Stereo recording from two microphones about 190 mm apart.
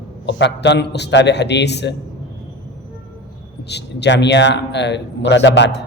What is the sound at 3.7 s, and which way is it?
A man's voice, 65° left (ahead or behind).